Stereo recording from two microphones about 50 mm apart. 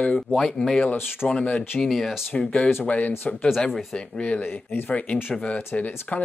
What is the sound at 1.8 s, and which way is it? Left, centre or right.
Speech, centre.